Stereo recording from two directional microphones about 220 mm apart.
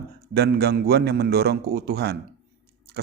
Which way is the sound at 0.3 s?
45° right (ahead or behind).